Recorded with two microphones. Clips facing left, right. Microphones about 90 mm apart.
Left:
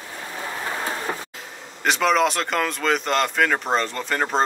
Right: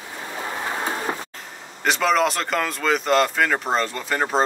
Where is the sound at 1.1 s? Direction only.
20° right (ahead or behind).